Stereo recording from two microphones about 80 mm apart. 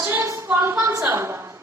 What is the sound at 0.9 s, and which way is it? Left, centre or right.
Speech, right.